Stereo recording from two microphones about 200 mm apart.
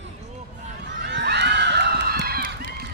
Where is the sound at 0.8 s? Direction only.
60° right (ahead or behind).